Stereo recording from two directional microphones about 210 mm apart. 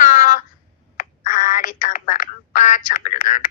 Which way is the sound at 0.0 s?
35° left (ahead or behind).